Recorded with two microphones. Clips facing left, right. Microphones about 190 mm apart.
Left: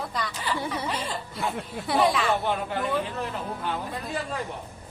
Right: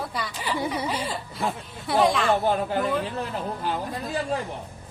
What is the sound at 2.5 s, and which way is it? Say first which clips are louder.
Speech: right 4 dB; 30° right (ahead or behind).